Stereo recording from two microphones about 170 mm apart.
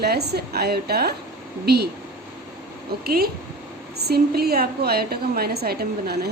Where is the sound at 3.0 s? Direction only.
65° right (ahead or behind).